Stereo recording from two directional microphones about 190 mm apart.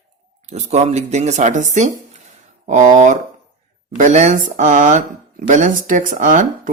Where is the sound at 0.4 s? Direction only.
35° right (ahead or behind).